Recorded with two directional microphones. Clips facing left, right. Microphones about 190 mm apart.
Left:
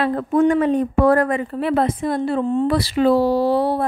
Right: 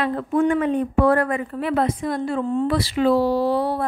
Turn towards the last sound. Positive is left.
turn(degrees=30)  # may be behind; listen again after turning